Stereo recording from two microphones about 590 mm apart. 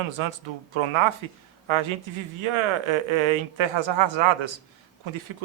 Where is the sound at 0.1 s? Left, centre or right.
Right.